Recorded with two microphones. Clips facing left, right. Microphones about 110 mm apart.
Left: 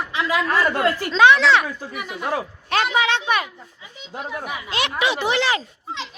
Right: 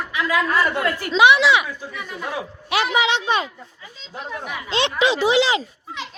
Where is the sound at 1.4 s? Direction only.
5° right (ahead or behind).